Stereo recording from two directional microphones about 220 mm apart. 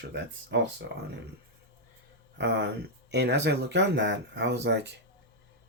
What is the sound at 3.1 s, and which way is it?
Speech, 50° right (ahead or behind).